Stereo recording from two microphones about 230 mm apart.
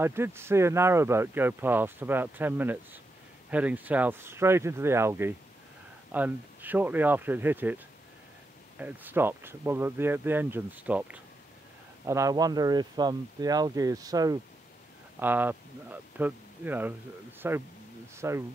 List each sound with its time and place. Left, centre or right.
0.0 s speech: centre